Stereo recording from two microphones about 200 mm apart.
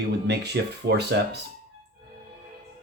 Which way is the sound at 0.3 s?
55° right (ahead or behind).